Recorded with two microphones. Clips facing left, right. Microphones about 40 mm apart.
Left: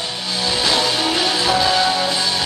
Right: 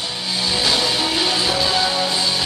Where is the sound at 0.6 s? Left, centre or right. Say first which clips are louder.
Left 2 dB; centre.